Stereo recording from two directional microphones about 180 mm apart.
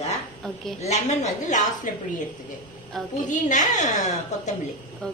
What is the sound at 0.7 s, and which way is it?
Speech, 40° left (ahead or behind).